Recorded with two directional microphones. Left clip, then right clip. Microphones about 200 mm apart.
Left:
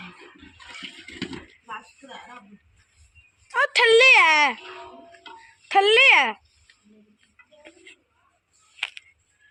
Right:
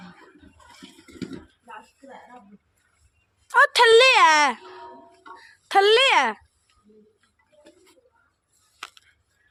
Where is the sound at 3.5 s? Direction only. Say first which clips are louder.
Right 3 dB; 20° right (ahead or behind).